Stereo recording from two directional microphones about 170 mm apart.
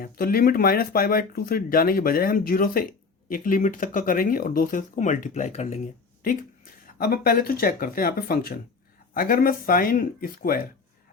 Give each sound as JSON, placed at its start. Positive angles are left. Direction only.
{"t": 0.0, "sound": "speech", "side_deg": 60}
{"t": 6.8, "sound": "speech", "side_deg": 60}